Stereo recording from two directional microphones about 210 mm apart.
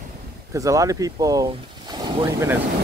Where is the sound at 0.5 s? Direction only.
15° right (ahead or behind).